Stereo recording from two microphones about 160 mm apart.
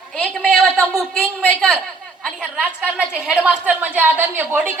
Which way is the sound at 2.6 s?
5° right (ahead or behind).